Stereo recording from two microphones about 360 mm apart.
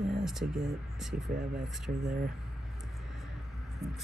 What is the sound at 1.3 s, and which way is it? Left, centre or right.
Speech, right.